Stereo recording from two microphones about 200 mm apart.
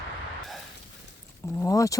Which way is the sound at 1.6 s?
15° left (ahead or behind).